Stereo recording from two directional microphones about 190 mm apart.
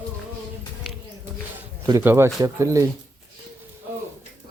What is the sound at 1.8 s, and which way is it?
Speech, 10° right (ahead or behind).